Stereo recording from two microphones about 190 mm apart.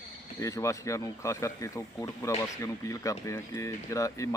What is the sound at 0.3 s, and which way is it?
Speech, 15° left (ahead or behind).